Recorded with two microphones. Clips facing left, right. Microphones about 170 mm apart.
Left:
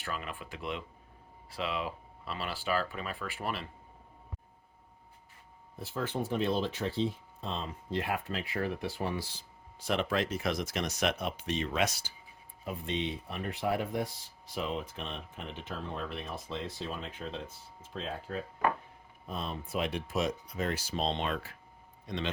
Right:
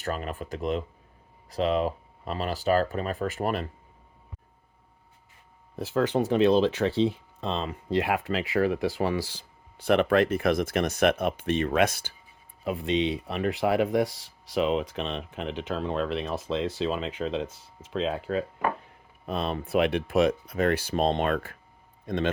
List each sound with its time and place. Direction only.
0.0 s speech: 40° right (ahead or behind)
5.7 s speech: 85° right; by 12.1 s 55° right (ahead or behind)
12.6 s speech: 90° right
19.2 s a man's voice: 75° right (ahead or behind); by 22.3 s 50° right (ahead or behind)